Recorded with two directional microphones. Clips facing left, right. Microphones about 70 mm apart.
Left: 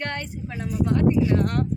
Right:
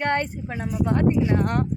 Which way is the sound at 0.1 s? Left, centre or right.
Right.